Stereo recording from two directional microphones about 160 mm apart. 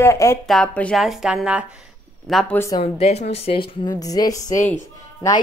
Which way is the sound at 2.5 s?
15° left (ahead or behind).